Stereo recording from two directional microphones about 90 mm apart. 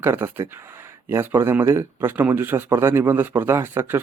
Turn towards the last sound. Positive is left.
turn(degrees=-30)  # may be behind; listen again after turning